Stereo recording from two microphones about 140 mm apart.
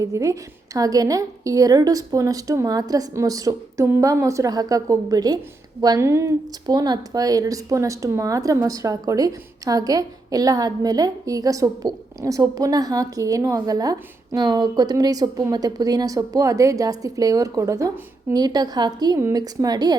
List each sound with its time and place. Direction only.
0.0 s speech: 20° right (ahead or behind)